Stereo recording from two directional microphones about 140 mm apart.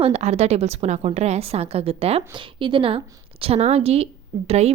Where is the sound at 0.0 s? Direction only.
50° right (ahead or behind).